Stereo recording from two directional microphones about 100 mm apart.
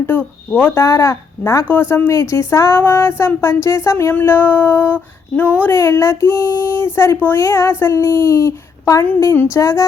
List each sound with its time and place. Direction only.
0.1 s speech: 15° left (ahead or behind)
0.9 s speech: 30° left (ahead or behind)
5.7 s speech: 30° left (ahead or behind)
9.6 s a sound: 30° left (ahead or behind)